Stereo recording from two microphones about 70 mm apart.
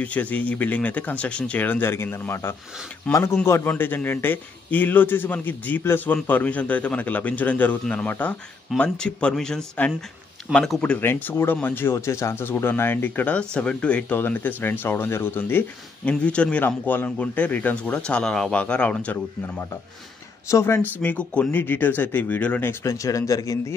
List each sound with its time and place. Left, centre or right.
0.0 s speech: left
1.9 s speech: left
3.6 s speech: left; by 10.8 s centre
11.0 s speech: left
14.1 s speech: left
16.1 s speech: centre
16.6 s speech: left
20.4 s speech: left; by 21.5 s centre
21.5 s speech: left
22.7 s speech: left